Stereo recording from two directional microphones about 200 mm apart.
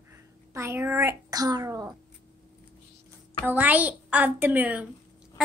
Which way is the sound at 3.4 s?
10° right (ahead or behind).